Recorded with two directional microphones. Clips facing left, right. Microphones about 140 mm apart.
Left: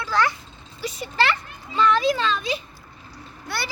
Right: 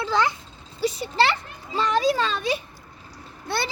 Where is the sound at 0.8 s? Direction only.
30° right (ahead or behind).